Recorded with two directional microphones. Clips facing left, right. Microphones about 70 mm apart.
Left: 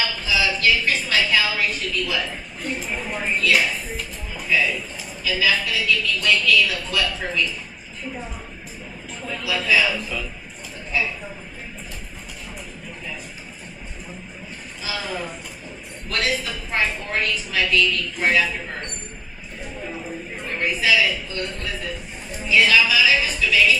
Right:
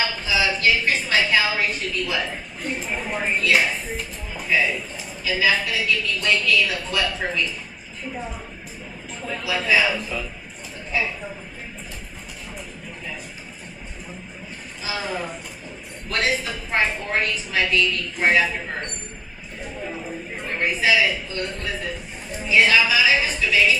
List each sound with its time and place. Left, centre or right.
0.0 s a sound: right
5.2 s a woman's voice: right
9.2 s a woman's voice: right
14.8 s a woman's voice: right